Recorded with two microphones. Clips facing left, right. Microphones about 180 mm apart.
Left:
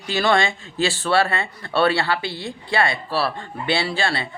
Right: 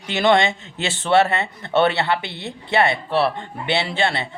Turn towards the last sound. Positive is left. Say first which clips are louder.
# right 1 dB
turn(degrees=-20)  # may be behind; listen again after turning